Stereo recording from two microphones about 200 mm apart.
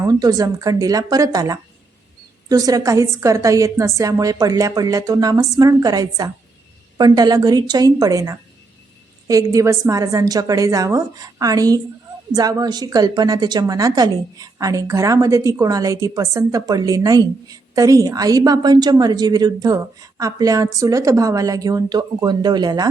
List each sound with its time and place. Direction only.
0.0 s a woman's voice: 20° right (ahead or behind)